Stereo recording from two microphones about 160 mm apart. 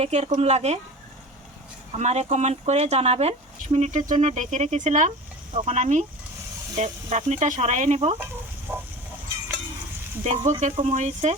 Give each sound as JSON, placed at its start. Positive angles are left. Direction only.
{"t": 0.0, "sound": "speech", "side_deg": -45}
{"t": 2.0, "sound": "speech", "side_deg": -45}
{"t": 8.7, "sound": "a sound", "side_deg": -15}
{"t": 10.2, "sound": "speech", "side_deg": -45}